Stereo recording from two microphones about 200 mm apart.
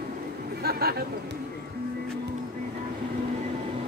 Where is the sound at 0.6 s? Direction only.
50° right (ahead or behind).